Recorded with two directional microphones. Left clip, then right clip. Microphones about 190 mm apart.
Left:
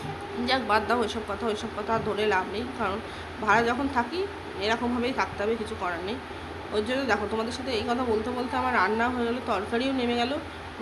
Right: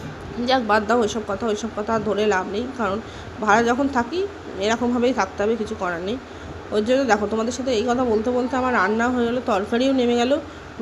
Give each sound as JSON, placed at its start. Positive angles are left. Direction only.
{"t": 0.4, "sound": "speech", "side_deg": -30}